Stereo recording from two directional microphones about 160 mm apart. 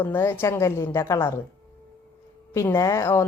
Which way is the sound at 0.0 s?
15° left (ahead or behind).